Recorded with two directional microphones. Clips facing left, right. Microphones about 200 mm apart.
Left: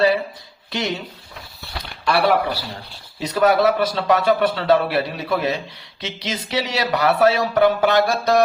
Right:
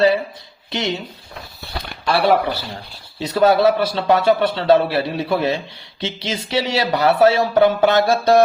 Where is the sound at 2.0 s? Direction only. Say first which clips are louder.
Right 2 dB; 25° right (ahead or behind).